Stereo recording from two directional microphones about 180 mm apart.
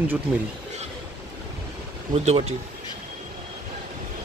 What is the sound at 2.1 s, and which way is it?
Speech, 35° right (ahead or behind).